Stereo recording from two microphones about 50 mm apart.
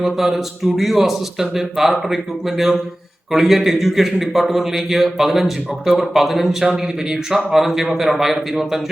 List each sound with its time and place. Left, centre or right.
0.0 s a man's voice: centre
3.3 s a man's voice: centre